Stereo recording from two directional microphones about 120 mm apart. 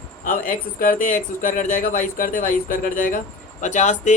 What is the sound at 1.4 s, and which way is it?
Speech, 90° left.